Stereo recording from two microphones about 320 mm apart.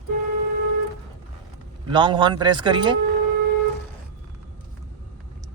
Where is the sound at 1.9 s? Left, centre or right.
Centre.